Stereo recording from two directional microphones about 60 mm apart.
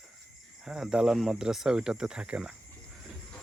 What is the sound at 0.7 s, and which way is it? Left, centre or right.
Speech, centre.